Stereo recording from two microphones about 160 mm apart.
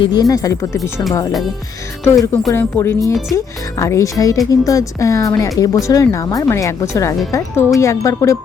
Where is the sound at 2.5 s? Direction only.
15° left (ahead or behind).